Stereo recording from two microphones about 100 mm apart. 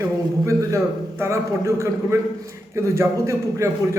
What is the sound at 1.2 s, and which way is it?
A man's voice, 30° right (ahead or behind).